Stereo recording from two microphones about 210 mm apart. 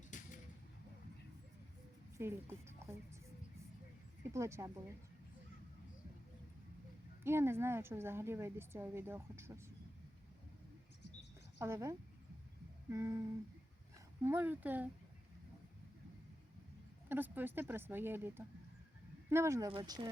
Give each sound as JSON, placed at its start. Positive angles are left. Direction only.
{"t": 0.1, "sound": "a sound", "side_deg": 35}
{"t": 2.1, "sound": "a woman's voice", "side_deg": -10}
{"t": 4.3, "sound": "a woman's voice", "side_deg": -15}
{"t": 7.3, "sound": "a woman's voice", "side_deg": -10}
{"t": 11.6, "sound": "a woman's voice", "side_deg": -15}
{"t": 14.3, "sound": "a woman's voice", "side_deg": -10}
{"t": 17.1, "sound": "a woman's voice", "side_deg": -10}